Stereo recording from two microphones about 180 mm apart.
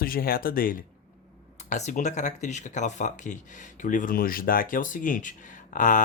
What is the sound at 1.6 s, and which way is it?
Speech, 40° left (ahead or behind).